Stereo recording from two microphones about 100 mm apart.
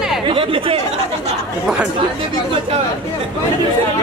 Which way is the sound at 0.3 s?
65° right (ahead or behind).